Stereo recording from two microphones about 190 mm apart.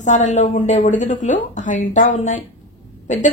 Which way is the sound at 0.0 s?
40° left (ahead or behind).